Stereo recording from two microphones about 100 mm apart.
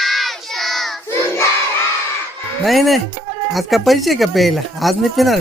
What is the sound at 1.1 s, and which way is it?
Child singing, 25° left (ahead or behind).